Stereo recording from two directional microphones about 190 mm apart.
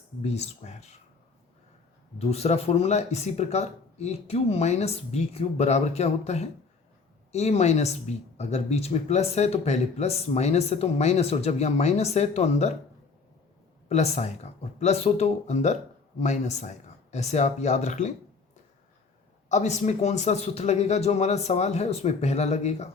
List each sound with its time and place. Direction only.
0.2 s speech: 35° left (ahead or behind)
2.1 s speech: 35° left (ahead or behind)
13.8 s speech: 35° left (ahead or behind)
19.5 s speech: 35° left (ahead or behind)